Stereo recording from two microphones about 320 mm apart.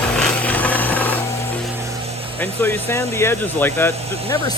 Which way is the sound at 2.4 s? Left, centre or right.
Centre.